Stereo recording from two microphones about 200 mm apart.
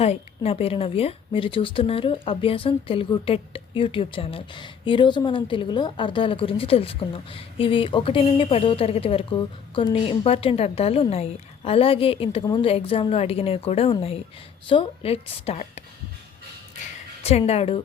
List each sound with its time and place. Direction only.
0.0 s speech: 30° left (ahead or behind)
17.2 s speech: 30° left (ahead or behind)